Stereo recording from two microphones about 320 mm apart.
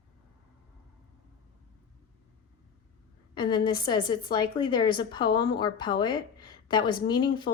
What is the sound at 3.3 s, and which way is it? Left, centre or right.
A woman's voice, centre.